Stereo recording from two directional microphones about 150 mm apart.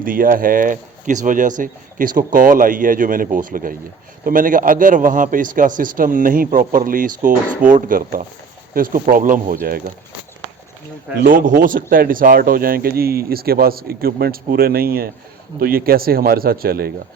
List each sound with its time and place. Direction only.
0.0 s speech: 70° right (ahead or behind)
11.2 s speech: 70° right (ahead or behind)